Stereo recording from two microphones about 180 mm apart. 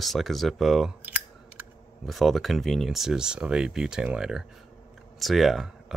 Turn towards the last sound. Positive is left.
turn(degrees=0)  # may be behind; listen again after turning